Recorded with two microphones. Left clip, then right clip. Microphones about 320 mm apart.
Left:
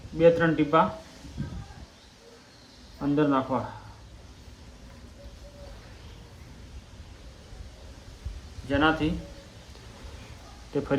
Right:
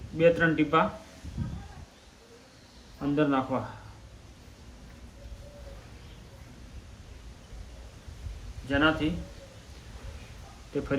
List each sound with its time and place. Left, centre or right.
0.2 s speech: centre
3.0 s speech: centre
8.6 s speech: centre
10.7 s speech: centre